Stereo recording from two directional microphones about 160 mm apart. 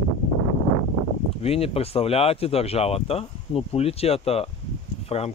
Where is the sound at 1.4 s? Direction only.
40° left (ahead or behind).